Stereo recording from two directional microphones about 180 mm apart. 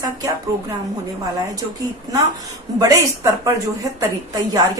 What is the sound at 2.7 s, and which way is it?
Speech, 20° right (ahead or behind).